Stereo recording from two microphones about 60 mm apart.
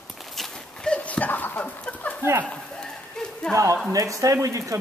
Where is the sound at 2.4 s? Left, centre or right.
Centre.